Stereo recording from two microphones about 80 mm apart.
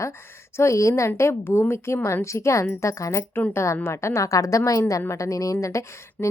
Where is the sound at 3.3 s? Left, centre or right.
Left.